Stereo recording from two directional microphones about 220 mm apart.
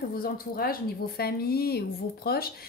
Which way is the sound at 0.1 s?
40° left (ahead or behind).